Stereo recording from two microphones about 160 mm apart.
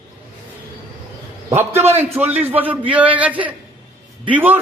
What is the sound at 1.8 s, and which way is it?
Speech, 40° right (ahead or behind).